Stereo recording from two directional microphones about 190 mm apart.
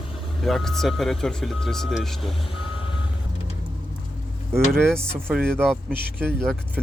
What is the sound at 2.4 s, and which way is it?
Reversing beeps, 30° left (ahead or behind).